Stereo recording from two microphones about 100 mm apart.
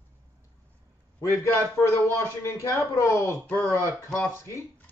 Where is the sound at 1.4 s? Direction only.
30° left (ahead or behind).